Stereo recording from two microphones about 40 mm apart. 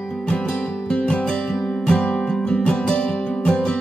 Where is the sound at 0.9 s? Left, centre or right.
Left.